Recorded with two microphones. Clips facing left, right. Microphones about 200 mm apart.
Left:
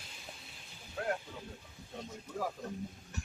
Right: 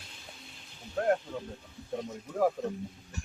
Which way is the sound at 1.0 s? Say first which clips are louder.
Right 8 dB; 45° right (ahead or behind).